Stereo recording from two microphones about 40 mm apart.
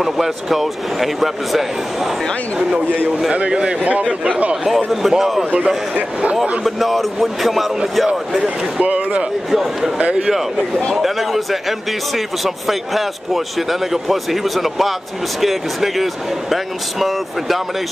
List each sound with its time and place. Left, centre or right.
0.0 s a man's voice: centre
3.3 s a man's voice: right
4.6 s a man's voice: centre
6.6 s a man's voice: centre
8.7 s speech: right
9.5 s a man's voice: centre
9.9 s speech: right
11.0 s a man's voice: centre
12.4 s a man's voice: centre